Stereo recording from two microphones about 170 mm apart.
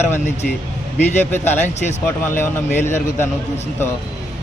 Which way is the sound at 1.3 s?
10° left (ahead or behind).